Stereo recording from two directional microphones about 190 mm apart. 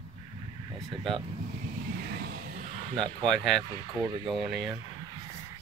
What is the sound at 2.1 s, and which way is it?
Music, 55° right (ahead or behind).